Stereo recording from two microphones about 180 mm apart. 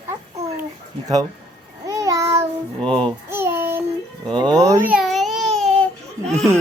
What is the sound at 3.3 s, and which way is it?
Child singing, 15° right (ahead or behind).